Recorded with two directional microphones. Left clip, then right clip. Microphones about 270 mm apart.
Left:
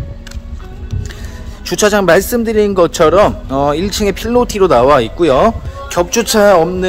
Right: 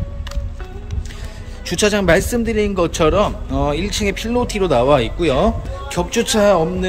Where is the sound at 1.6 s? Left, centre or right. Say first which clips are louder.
Left 5 dB; centre.